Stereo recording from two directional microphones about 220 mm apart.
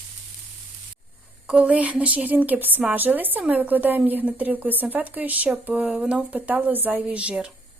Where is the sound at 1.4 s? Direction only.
5° right (ahead or behind).